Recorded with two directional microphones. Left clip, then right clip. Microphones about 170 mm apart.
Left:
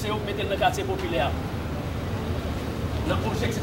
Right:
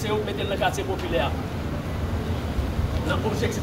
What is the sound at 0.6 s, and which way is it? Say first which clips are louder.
Speech: left 2 dB; 25° right (ahead or behind).